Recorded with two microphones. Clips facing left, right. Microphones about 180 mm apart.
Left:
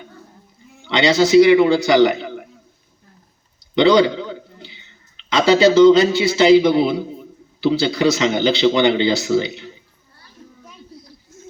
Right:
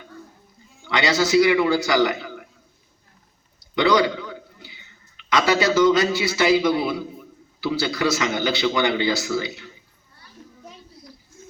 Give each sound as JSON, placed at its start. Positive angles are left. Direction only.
{"t": 0.9, "sound": "a man's voice", "side_deg": 25}
{"t": 3.8, "sound": "a man's voice", "side_deg": 25}